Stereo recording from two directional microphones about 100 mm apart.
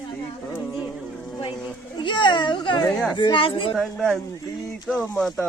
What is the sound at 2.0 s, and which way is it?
A woman's voice, 50° left (ahead or behind).